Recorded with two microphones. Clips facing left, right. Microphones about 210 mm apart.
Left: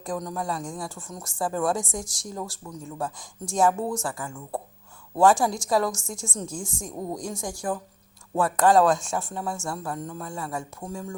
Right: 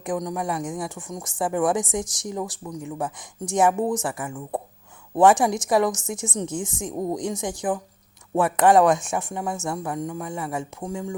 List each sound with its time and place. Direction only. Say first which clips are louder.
0.0 s a woman's voice: right 4 dB; 15° right (ahead or behind)